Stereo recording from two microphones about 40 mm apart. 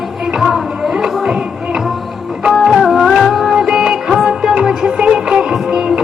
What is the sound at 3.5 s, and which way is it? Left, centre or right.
Music, centre.